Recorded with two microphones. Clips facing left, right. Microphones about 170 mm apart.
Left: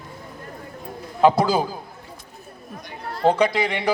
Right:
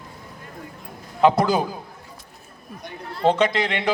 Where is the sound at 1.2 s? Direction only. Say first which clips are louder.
Even; 5° left (ahead or behind).